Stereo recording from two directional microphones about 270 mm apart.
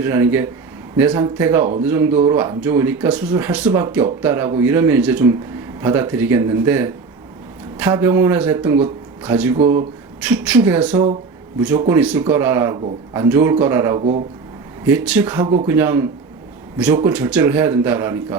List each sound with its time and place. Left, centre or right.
0.0 s speech: centre
14.0 s speech: right
14.8 s speech: centre